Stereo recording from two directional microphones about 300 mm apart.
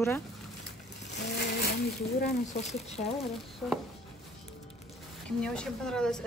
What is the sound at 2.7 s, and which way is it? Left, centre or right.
Speech, left.